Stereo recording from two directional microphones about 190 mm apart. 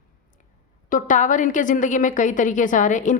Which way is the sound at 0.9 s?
45° left (ahead or behind).